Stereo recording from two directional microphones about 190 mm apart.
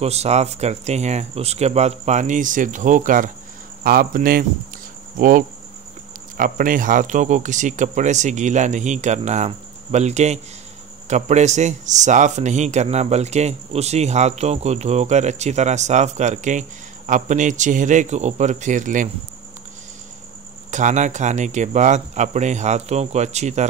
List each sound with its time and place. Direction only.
0.0 s speech: 35° right (ahead or behind); by 4.5 s 50° right (ahead or behind)
6.3 s speech: 45° right (ahead or behind)
20.7 s speech: 40° right (ahead or behind)